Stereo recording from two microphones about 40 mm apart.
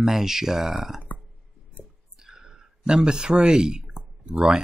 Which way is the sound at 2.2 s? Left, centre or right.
Centre.